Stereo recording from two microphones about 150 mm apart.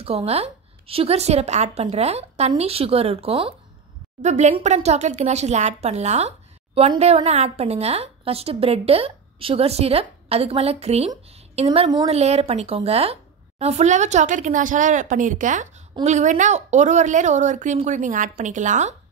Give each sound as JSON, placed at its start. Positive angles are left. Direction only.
{"t": 0.0, "sound": "a woman's voice", "side_deg": -40}
{"t": 4.2, "sound": "a woman's voice", "side_deg": -50}